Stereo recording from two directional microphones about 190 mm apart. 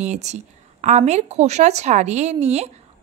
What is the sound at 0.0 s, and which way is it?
A woman's voice, 35° right (ahead or behind).